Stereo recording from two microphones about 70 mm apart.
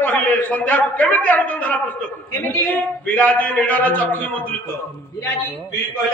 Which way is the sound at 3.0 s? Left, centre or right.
Left.